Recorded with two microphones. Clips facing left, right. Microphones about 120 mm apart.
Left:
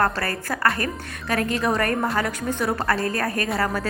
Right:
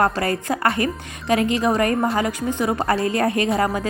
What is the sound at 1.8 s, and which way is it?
Speech, 5° right (ahead or behind).